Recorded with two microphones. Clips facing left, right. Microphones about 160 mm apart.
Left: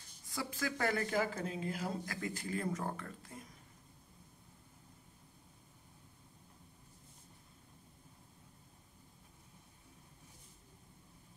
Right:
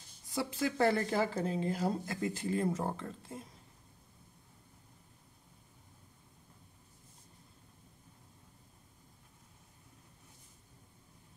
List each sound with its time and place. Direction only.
0.3 s speech: 20° right (ahead or behind)
2.0 s speech: 25° right (ahead or behind)